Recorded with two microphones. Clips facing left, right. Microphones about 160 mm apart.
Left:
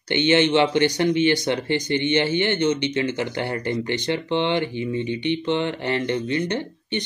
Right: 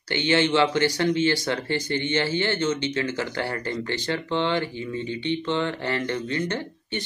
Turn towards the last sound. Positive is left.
turn(degrees=20)  # may be behind; listen again after turning